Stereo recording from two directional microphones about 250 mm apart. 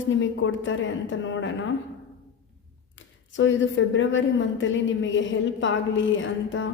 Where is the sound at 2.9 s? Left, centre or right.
Left.